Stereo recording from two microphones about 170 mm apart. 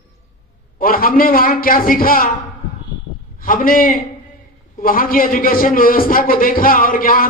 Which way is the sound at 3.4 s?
55° left (ahead or behind).